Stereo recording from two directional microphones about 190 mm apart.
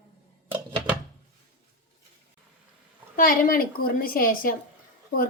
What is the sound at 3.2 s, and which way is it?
A woman's voice, 50° left (ahead or behind).